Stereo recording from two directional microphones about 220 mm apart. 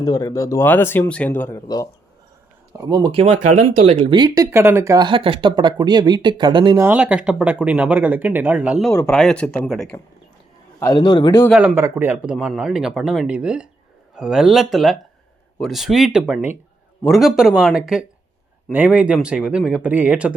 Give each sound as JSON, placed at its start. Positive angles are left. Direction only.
{"t": 0.0, "sound": "speech", "side_deg": 15}
{"t": 2.7, "sound": "speech", "side_deg": -15}
{"t": 6.8, "sound": "speech", "side_deg": -5}
{"t": 10.8, "sound": "a man's voice", "side_deg": 15}
{"t": 11.4, "sound": "speech", "side_deg": -5}